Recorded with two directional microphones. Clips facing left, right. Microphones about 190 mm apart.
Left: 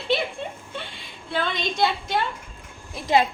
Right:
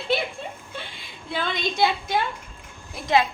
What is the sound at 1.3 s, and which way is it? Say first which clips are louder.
Speech: left 1 dB; 10° right (ahead or behind).